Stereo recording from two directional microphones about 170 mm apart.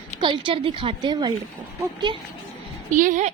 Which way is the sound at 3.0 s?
50° right (ahead or behind).